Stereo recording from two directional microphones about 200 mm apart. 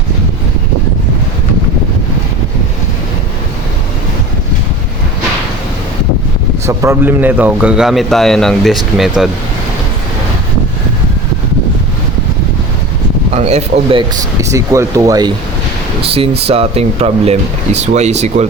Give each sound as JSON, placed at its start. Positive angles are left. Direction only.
{"t": 6.7, "sound": "a man's voice", "side_deg": -10}
{"t": 13.3, "sound": "speech", "side_deg": -35}
{"t": 14.4, "sound": "speech", "side_deg": -15}
{"t": 16.0, "sound": "speech", "side_deg": -30}